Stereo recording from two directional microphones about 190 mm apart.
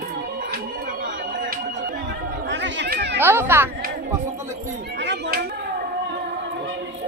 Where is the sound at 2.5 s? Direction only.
70° right (ahead or behind).